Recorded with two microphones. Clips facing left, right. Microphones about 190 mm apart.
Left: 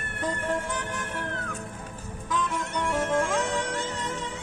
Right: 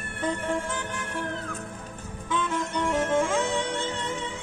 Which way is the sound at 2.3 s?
5° right (ahead or behind).